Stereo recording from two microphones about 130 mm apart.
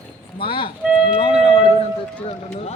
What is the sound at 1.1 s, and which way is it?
Speech, 45° left (ahead or behind).